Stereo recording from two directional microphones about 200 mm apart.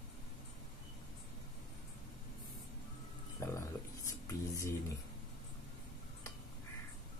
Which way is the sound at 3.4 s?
15° left (ahead or behind).